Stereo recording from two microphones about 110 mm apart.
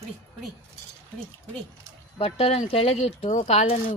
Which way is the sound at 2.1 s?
60° left (ahead or behind).